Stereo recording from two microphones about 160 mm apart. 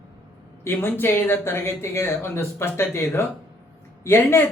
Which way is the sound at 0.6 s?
15° left (ahead or behind).